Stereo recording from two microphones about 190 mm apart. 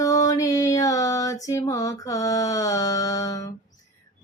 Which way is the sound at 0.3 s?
15° left (ahead or behind).